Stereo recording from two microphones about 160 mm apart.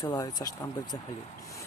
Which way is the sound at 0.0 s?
25° left (ahead or behind).